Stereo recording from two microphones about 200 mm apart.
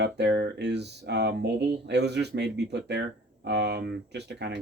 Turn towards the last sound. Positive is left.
turn(degrees=-55)  # may be behind; listen again after turning